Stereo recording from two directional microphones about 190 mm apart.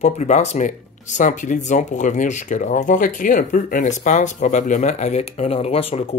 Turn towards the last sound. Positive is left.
turn(degrees=30)  # may be behind; listen again after turning